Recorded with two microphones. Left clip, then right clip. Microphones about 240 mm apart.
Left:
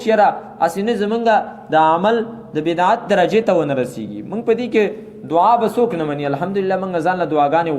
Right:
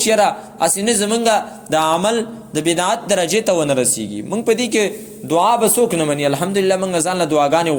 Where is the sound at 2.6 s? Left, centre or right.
Right.